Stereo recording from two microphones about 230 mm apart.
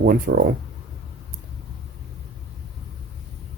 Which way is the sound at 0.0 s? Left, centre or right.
Right.